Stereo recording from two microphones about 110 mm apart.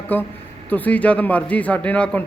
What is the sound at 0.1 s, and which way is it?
Speech, 15° left (ahead or behind).